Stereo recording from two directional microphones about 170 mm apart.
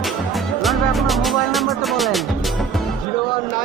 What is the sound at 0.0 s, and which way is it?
Music, centre (ahead or behind).